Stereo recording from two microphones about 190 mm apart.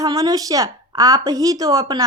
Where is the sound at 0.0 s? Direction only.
20° right (ahead or behind).